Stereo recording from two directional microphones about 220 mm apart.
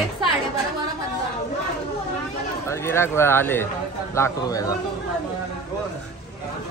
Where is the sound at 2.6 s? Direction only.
10° left (ahead or behind).